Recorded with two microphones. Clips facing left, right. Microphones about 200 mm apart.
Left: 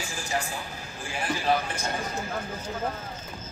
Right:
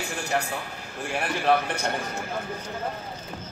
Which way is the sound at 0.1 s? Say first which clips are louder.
Right 3 dB; 65° right (ahead or behind).